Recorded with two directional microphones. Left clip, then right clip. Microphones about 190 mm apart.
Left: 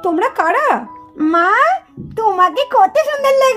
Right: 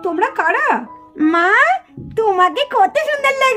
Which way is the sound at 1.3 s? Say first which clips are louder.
Left 1 dB; 10° left (ahead or behind).